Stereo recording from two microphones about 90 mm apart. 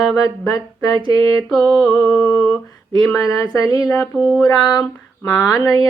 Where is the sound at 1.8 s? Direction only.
45° left (ahead or behind).